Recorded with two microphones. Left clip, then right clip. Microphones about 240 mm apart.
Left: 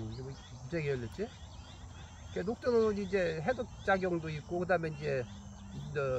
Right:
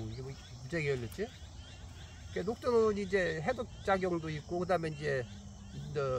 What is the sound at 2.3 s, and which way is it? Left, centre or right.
Speech, centre.